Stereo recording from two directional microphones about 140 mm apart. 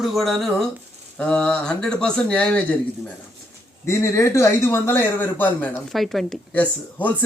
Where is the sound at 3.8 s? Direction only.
20° left (ahead or behind).